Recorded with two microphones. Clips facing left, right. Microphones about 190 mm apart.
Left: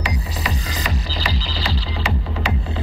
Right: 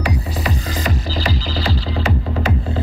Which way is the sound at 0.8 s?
50° right (ahead or behind).